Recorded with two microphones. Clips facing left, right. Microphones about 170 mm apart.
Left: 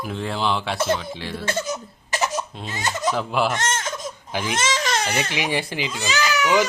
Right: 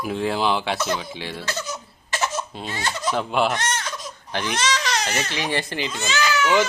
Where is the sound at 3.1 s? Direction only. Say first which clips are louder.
Right 4 dB; centre (ahead or behind).